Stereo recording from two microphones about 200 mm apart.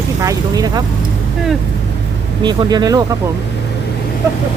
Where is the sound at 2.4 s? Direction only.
20° right (ahead or behind).